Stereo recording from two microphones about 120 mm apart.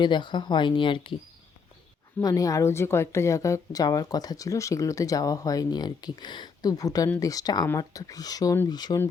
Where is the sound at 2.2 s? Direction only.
30° left (ahead or behind).